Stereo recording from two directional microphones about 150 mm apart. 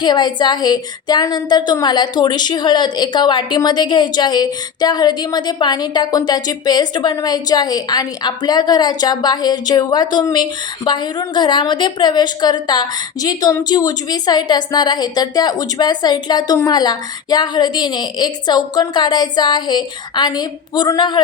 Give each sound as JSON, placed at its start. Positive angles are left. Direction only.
{"t": 0.0, "sound": "a woman's voice", "side_deg": 30}